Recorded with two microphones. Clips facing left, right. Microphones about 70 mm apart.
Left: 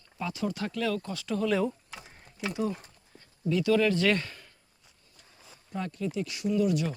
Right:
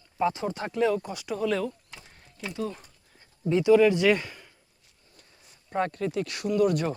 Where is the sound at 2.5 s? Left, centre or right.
Centre.